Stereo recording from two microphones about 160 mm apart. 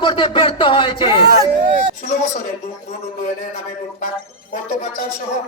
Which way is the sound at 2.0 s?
55° left (ahead or behind).